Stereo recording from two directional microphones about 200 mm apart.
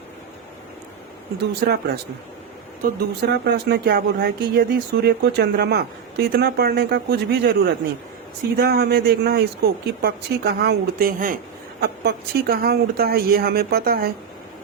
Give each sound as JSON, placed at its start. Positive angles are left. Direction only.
{"t": 1.6, "sound": "speech", "side_deg": -55}